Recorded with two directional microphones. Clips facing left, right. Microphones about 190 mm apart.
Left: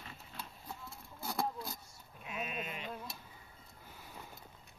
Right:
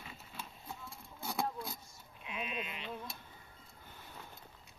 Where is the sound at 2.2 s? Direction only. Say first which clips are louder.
Even; 45° left (ahead or behind).